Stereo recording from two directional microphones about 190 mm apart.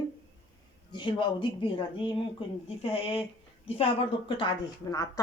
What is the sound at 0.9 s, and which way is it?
Speech, 25° left (ahead or behind).